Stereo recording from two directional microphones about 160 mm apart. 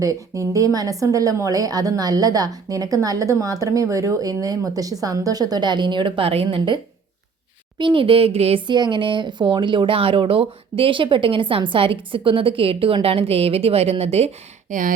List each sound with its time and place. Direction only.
0.0 s a woman's voice: 20° right (ahead or behind)
7.8 s speech: 30° right (ahead or behind)
14.7 s speech: 55° right (ahead or behind)